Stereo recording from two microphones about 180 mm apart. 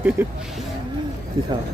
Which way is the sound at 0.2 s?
10° right (ahead or behind).